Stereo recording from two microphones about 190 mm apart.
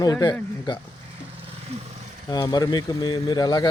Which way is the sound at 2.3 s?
20° left (ahead or behind).